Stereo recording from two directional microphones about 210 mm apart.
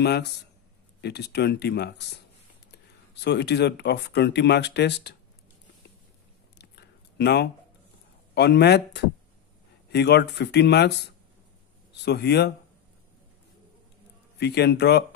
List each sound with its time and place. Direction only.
0.0 s speech: 50° left (ahead or behind)
6.6 s a sound: 50° left (ahead or behind)
8.4 s speech: 50° left (ahead or behind)
14.4 s speech: 50° left (ahead or behind)